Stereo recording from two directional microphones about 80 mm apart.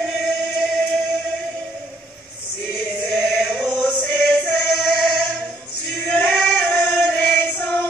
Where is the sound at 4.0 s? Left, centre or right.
Left.